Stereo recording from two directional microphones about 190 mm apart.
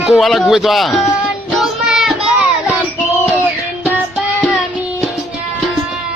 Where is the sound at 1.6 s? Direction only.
Centre (ahead or behind).